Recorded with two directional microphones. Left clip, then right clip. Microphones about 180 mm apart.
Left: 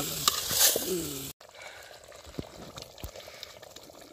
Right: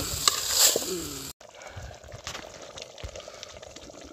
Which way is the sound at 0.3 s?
5° right (ahead or behind).